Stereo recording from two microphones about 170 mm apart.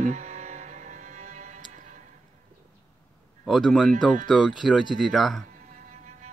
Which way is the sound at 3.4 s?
Centre (ahead or behind).